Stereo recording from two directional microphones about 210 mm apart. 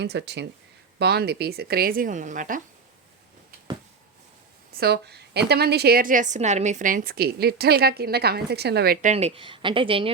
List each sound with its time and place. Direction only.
0.0 s a woman's voice: 55° right (ahead or behind); by 2.6 s 40° right (ahead or behind)
4.7 s a woman's voice: 50° right (ahead or behind); by 10.1 s 25° right (ahead or behind)